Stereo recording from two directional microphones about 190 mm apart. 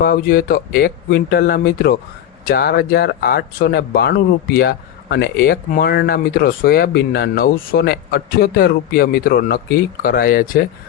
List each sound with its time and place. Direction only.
0.0 s speech: 50° left (ahead or behind)